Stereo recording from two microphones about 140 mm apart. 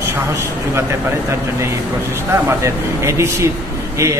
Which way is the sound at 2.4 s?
20° right (ahead or behind).